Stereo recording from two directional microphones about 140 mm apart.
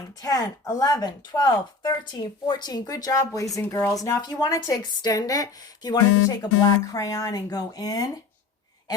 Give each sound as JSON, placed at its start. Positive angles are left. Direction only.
{"t": 0.2, "sound": "speech", "side_deg": 25}